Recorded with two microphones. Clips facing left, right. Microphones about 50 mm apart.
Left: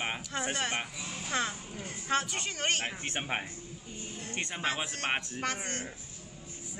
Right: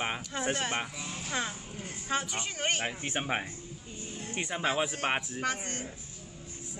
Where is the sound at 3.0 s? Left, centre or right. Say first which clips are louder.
Right 2 dB; centre.